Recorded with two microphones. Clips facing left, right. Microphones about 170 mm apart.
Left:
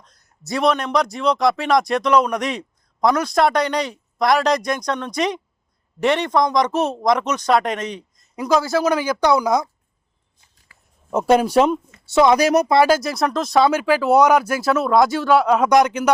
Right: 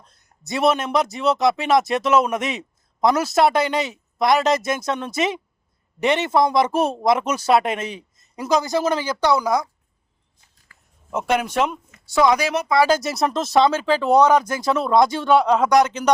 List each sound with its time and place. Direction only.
0.0 s a sound: 30° right (ahead or behind)
0.4 s speech: 5° right (ahead or behind); by 9.6 s 15° left (ahead or behind)
11.1 s speech: 35° left (ahead or behind)
12.4 s speech: 40° left (ahead or behind)
13.1 s speech: centre (ahead or behind)
13.7 s speech: 10° left (ahead or behind)